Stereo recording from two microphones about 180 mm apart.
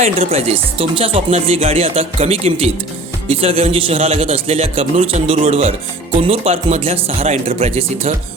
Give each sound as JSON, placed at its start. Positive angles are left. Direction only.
{"t": 0.0, "sound": "speech", "side_deg": -35}